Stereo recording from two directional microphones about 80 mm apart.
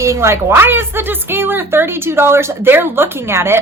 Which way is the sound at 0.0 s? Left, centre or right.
Right.